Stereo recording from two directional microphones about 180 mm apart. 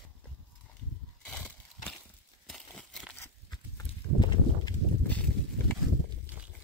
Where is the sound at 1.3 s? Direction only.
5° left (ahead or behind).